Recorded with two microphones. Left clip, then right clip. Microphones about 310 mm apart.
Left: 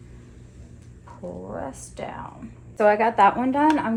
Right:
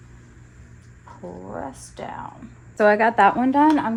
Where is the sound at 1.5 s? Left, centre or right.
Right.